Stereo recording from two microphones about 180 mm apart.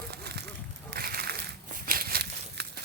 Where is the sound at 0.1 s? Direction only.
65° right (ahead or behind).